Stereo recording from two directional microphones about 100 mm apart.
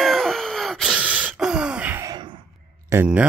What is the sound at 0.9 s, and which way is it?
Gasp, 15° right (ahead or behind).